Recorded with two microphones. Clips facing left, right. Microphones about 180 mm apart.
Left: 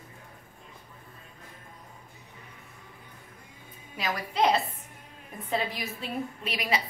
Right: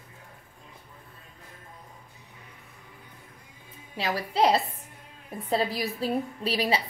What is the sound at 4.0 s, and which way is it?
A woman's voice, 30° right (ahead or behind).